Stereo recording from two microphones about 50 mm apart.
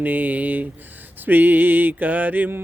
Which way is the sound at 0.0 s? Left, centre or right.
Right.